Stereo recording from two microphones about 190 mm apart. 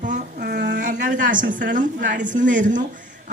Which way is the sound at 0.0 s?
45° right (ahead or behind).